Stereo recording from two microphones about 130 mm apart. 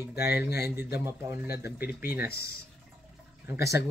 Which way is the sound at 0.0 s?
15° right (ahead or behind).